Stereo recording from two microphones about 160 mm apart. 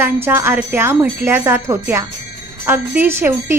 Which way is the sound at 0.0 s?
15° right (ahead or behind).